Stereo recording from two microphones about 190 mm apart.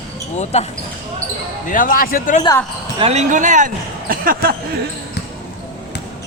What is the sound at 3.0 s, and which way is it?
Speech, 35° right (ahead or behind).